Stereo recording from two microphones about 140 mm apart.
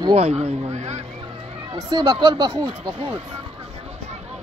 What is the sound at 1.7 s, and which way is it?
Speech, 35° right (ahead or behind).